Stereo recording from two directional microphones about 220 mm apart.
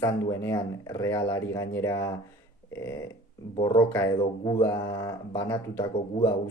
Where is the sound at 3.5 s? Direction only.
20° left (ahead or behind).